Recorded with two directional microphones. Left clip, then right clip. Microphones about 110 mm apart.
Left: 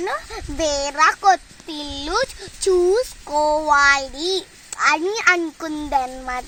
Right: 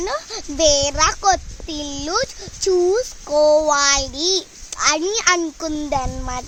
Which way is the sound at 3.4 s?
35° right (ahead or behind).